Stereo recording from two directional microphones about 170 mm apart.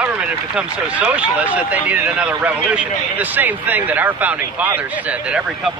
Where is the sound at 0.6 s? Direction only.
5° right (ahead or behind).